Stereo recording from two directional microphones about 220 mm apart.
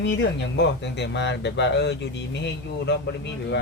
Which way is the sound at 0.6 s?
50° left (ahead or behind).